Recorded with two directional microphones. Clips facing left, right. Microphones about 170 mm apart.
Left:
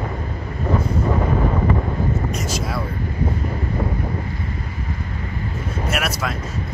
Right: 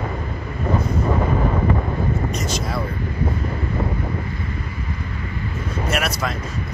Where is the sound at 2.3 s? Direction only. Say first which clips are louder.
Even; 5° left (ahead or behind).